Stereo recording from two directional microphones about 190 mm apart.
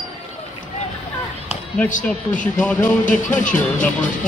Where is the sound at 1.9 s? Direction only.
45° left (ahead or behind).